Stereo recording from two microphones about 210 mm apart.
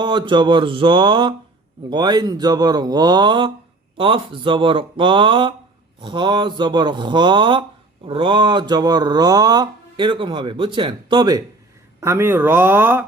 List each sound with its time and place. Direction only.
0.0 s speech: 20° right (ahead or behind)